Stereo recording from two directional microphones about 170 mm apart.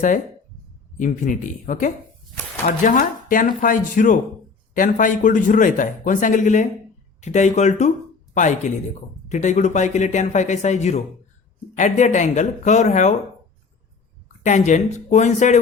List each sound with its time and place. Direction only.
0.9 s speech: 50° left (ahead or behind)
14.4 s speech: 45° left (ahead or behind)